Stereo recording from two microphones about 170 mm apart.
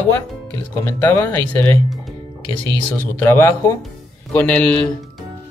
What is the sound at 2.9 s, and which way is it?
Speech, 15° left (ahead or behind).